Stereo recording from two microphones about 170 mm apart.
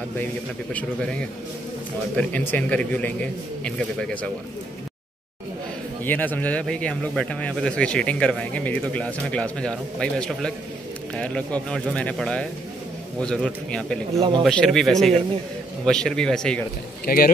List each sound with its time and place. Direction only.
2.1 s a man's voice: 10° left (ahead or behind)
6.0 s a man's voice: 10° left (ahead or behind)
17.0 s speech: 60° left (ahead or behind)